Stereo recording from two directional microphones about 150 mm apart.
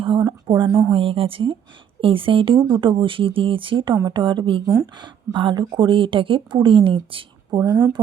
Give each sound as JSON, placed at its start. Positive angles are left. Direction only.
{"t": 0.0, "sound": "a sound", "side_deg": -35}
{"t": 0.9, "sound": "speech", "side_deg": -35}
{"t": 4.6, "sound": "speech", "side_deg": -20}